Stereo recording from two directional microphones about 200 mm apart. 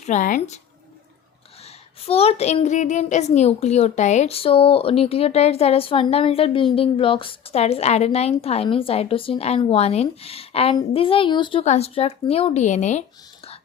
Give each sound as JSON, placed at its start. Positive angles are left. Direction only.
{"t": 0.0, "sound": "speech", "side_deg": 40}
{"t": 1.6, "sound": "speech", "side_deg": 30}